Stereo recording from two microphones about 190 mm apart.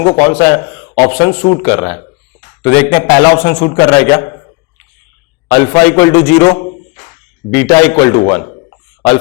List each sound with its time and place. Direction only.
0.0 s a man's voice: 20° left (ahead or behind)
1.2 s speech: 30° left (ahead or behind)
1.6 s a man's voice: 20° left (ahead or behind)
5.5 s a man's voice: 15° left (ahead or behind)